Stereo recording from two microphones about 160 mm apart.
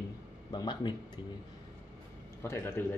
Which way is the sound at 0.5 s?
25° left (ahead or behind).